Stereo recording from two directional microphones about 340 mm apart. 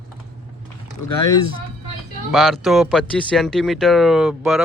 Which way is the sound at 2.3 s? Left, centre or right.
Centre.